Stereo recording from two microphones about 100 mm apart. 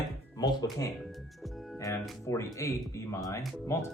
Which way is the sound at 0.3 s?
40° left (ahead or behind).